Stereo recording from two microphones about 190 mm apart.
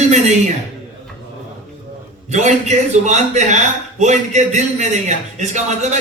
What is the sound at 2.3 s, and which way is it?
A man's voice, 35° right (ahead or behind).